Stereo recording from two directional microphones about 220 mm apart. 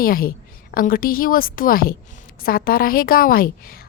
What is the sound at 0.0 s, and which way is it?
A woman's voice, 40° left (ahead or behind).